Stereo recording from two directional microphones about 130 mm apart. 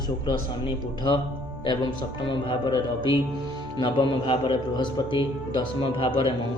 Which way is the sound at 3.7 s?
35° left (ahead or behind).